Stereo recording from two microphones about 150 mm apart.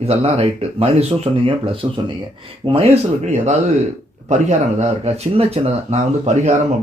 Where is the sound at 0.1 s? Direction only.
40° right (ahead or behind).